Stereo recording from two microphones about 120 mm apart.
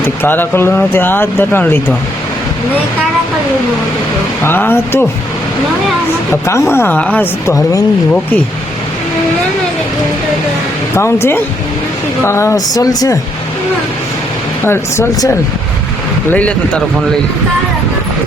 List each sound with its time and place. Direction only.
0.2 s speech: 15° left (ahead or behind)
4.4 s speech: 15° left (ahead or behind)
6.4 s speech: 25° left (ahead or behind)
7.5 s speech: 30° left (ahead or behind)
10.9 s speech: 20° left (ahead or behind)
14.6 s speech: 20° left (ahead or behind)
16.3 s speech: 10° left (ahead or behind)